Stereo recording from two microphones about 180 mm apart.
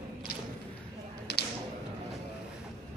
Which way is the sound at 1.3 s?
65° left (ahead or behind).